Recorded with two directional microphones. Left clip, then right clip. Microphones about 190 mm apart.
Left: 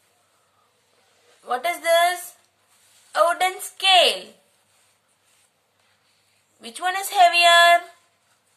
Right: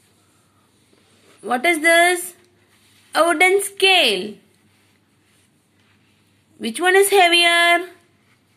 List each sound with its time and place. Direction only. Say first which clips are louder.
1.4 s speech: right 7 dB; 30° right (ahead or behind)
6.6 s speech: right 10 dB; 30° right (ahead or behind)